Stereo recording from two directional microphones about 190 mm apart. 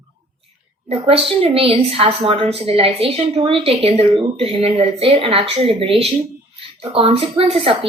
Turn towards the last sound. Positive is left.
turn(degrees=-30)  # may be behind; listen again after turning